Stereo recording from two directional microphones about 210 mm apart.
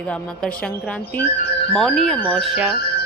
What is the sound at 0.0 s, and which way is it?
A woman's voice, 5° left (ahead or behind).